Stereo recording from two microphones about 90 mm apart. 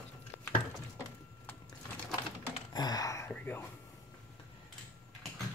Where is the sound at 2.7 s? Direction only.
50° left (ahead or behind).